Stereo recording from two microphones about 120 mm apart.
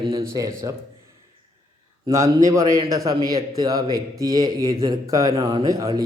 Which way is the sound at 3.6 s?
30° right (ahead or behind).